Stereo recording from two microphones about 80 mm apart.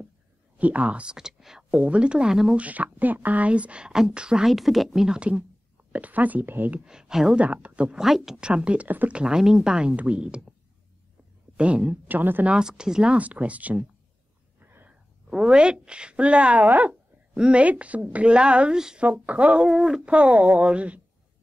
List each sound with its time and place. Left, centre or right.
0.6 s speech: centre
2.6 s speech: centre
6.8 s speech: centre
7.4 s speech: centre
9.2 s speech: centre
11.5 s speech: centre
12.5 s speech: centre
14.6 s a sound: right
14.9 s a woman's voice: centre